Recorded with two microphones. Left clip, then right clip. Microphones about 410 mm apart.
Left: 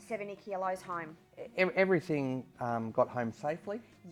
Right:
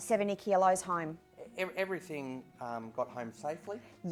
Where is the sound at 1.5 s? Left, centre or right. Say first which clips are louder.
Left 7 dB; left.